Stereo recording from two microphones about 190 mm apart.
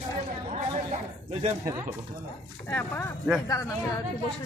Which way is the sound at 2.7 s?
10° left (ahead or behind).